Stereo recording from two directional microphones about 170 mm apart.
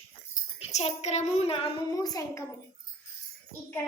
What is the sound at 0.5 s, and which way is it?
A child's voice, 40° left (ahead or behind).